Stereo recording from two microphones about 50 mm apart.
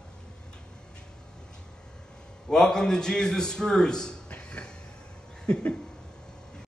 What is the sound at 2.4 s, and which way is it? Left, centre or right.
A man's voice, centre.